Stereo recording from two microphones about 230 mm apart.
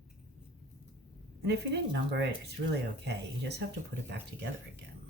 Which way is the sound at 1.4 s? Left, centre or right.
Right.